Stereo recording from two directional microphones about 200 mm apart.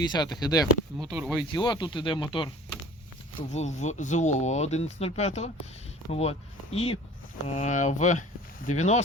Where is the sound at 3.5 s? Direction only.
35° left (ahead or behind).